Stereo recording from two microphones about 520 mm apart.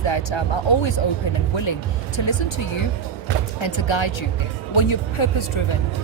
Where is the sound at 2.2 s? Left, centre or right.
Left.